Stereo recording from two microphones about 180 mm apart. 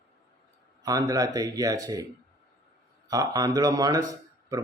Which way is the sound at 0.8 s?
20° right (ahead or behind).